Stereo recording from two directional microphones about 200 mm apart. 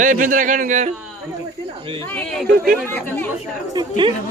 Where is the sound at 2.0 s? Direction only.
5° left (ahead or behind).